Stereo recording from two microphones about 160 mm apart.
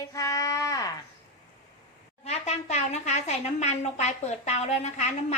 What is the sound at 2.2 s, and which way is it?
A woman's voice, 40° left (ahead or behind).